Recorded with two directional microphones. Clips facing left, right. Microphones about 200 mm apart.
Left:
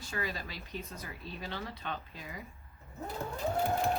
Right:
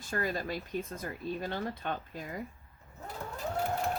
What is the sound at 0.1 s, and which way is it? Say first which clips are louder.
Speech: right 6 dB; 50° right (ahead or behind).